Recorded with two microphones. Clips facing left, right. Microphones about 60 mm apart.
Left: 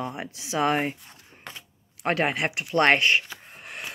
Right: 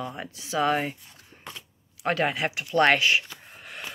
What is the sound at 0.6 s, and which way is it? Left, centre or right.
Speech, left.